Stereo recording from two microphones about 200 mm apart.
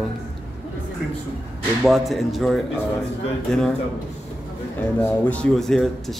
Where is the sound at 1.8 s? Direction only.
Centre (ahead or behind).